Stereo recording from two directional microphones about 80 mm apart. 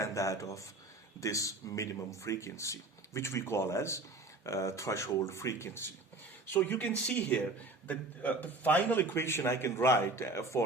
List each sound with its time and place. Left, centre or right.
0.0 s a man's voice: left